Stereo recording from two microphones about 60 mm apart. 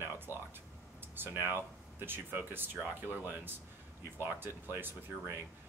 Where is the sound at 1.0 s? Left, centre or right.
Right.